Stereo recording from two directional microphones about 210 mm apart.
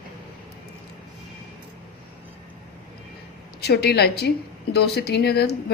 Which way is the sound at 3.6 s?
50° left (ahead or behind).